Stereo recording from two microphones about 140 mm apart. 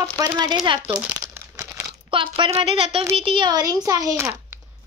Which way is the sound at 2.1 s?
35° right (ahead or behind).